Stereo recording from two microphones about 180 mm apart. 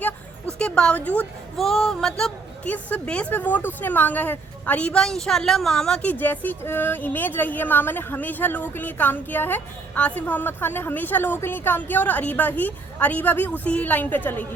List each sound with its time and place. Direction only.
0.6 s speech: 5° left (ahead or behind)